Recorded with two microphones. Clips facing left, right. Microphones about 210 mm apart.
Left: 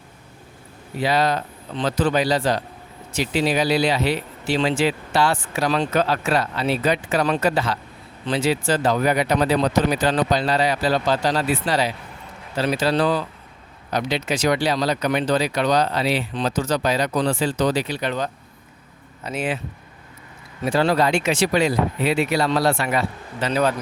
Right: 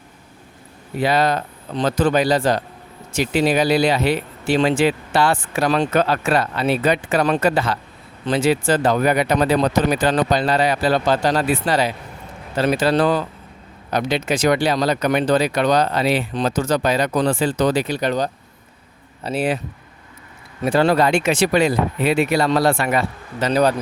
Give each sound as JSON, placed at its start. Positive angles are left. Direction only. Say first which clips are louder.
{"t": 0.9, "sound": "speech", "louder": "right 2 dB", "side_deg": -55}
{"t": 20.7, "sound": "speech", "louder": "right 3 dB", "side_deg": -55}
{"t": 23.5, "sound": "speech", "louder": "right 4 dB", "side_deg": -40}